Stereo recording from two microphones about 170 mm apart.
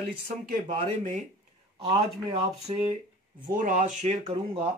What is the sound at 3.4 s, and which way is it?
Speech, 50° right (ahead or behind).